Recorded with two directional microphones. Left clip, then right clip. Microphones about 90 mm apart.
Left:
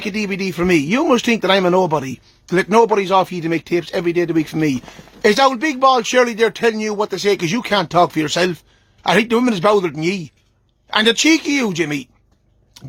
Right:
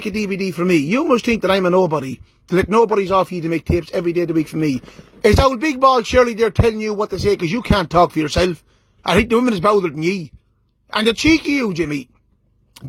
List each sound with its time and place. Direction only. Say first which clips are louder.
0.0 s speech: left 1 dB; 35° right (ahead or behind)
0.3 s speech: left 1 dB; 25° right (ahead or behind)
5.6 s speech: even; 45° right (ahead or behind)
6.0 s speech: even; 30° right (ahead or behind)
7.7 s speech: even; 45° right (ahead or behind); by 12.0 s 25° right (ahead or behind)
12.7 s a sound: right 1 dB; 90° right